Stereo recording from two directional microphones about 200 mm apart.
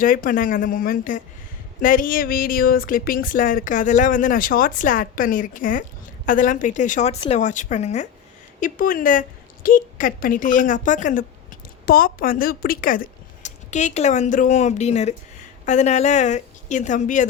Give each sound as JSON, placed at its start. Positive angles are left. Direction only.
{"t": 0.0, "sound": "speech", "side_deg": 45}